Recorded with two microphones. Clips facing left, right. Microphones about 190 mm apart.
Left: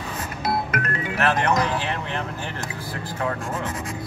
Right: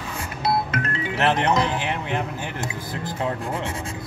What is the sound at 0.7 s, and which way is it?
Speech, 25° right (ahead or behind).